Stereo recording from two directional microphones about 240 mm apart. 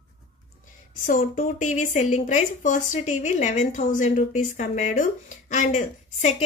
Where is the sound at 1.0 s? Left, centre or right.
Left.